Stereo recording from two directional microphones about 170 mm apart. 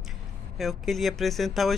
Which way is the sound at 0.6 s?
Centre (ahead or behind).